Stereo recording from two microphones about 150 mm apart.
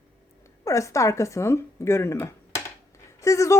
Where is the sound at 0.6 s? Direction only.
20° left (ahead or behind).